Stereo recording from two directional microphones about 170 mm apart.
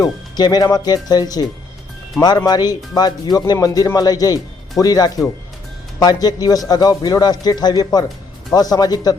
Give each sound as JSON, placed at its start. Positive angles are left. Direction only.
{"t": 0.0, "sound": "speech", "side_deg": 25}